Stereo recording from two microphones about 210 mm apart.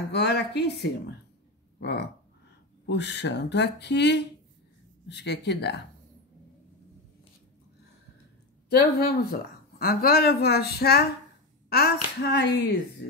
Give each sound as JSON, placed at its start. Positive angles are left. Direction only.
{"t": 0.1, "sound": "speech", "side_deg": 50}
{"t": 9.0, "sound": "speech", "side_deg": 45}